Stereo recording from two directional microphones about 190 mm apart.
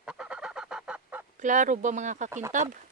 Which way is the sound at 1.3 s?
40° right (ahead or behind).